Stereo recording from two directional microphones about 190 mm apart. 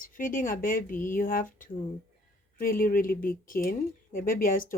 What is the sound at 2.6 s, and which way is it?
Speech, 50° left (ahead or behind).